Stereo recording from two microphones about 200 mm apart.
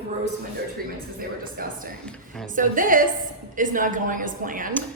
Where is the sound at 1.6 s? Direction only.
45° right (ahead or behind).